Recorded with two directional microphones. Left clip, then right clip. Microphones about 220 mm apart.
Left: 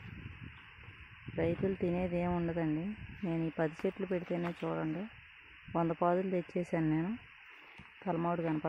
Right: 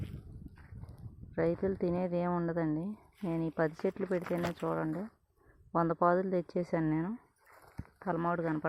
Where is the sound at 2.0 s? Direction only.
10° left (ahead or behind).